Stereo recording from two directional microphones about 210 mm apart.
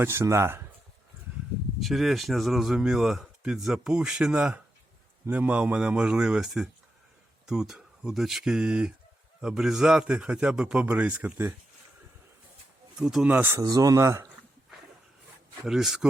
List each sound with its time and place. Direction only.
0.0 s speech: 10° right (ahead or behind)
1.8 s speech: centre (ahead or behind)
13.0 s speech: 5° right (ahead or behind)
15.6 s speech: centre (ahead or behind)